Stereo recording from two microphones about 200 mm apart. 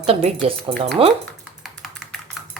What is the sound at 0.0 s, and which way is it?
Speech, 30° right (ahead or behind).